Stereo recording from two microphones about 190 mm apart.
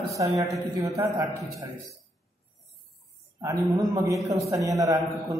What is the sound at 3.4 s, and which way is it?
A woman's voice, 15° right (ahead or behind).